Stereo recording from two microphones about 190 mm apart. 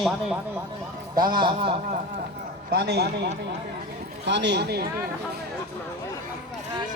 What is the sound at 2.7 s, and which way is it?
A man's voice, 60° right (ahead or behind).